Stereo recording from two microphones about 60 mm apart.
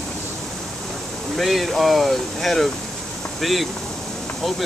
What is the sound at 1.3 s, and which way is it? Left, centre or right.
Speech, centre.